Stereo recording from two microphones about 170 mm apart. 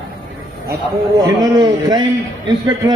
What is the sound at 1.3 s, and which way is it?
Speech, 20° right (ahead or behind).